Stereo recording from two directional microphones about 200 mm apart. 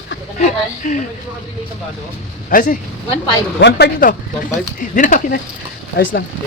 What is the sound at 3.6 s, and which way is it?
Speech, 55° left (ahead or behind).